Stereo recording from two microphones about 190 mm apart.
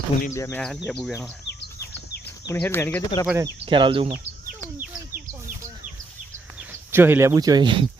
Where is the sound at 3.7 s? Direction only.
25° right (ahead or behind).